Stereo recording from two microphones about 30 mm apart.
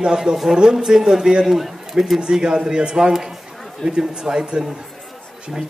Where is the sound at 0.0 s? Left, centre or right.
Centre.